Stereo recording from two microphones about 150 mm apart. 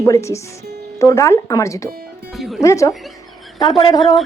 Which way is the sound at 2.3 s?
Centre (ahead or behind).